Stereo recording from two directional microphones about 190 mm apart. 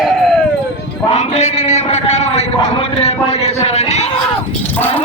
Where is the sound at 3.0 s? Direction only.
35° left (ahead or behind).